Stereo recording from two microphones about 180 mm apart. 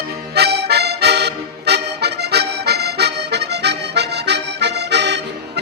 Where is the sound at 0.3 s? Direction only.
65° right (ahead or behind).